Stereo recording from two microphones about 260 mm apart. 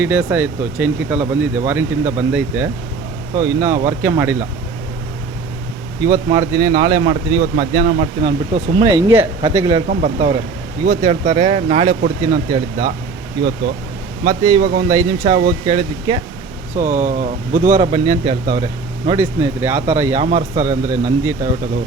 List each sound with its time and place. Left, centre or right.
0.0 s speech: centre
6.0 s speech: centre
9.9 s speech: right
12.5 s speech: centre
16.7 s speech: right
17.7 s speech: centre